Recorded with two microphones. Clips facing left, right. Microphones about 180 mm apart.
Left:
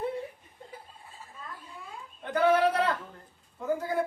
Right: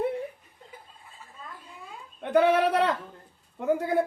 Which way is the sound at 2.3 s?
65° right (ahead or behind).